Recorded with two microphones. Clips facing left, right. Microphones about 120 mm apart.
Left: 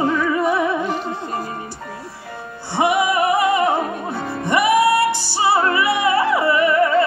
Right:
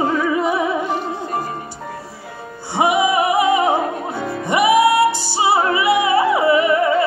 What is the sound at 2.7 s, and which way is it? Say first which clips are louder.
Music: right 1 dB; 15° right (ahead or behind).